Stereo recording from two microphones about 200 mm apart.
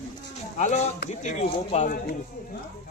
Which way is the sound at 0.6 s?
35° left (ahead or behind).